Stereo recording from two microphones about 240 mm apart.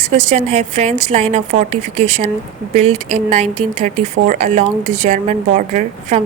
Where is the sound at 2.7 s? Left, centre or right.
Right.